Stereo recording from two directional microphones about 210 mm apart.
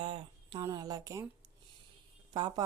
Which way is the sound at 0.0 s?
25° right (ahead or behind).